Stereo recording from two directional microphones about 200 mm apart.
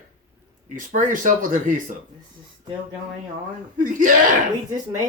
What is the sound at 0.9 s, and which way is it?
Speech, 40° right (ahead or behind).